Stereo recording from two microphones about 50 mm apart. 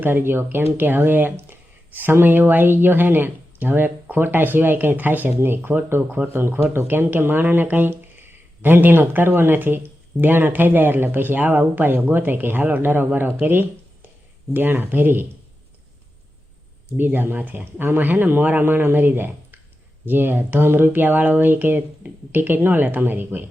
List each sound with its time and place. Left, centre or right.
0.0 s speech: right
17.0 s speech: right
17.7 s speech: right